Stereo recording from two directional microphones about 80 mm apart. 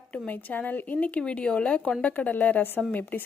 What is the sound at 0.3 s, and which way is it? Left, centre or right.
A woman's voice, left.